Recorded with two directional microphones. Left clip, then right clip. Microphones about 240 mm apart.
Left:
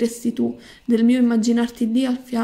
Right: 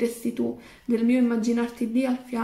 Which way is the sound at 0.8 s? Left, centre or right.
Left.